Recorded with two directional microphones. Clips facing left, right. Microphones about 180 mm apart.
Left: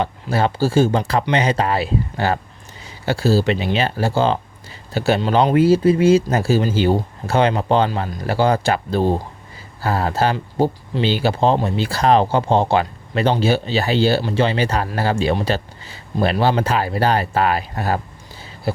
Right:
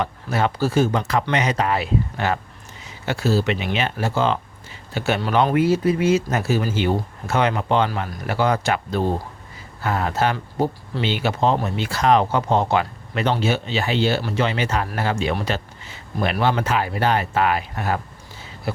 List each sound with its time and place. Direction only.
0.0 s speech: 30° left (ahead or behind)